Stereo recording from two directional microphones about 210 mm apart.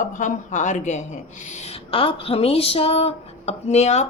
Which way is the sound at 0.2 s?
35° left (ahead or behind).